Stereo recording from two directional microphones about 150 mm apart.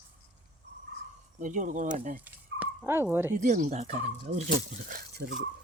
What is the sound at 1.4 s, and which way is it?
Speech, 60° right (ahead or behind).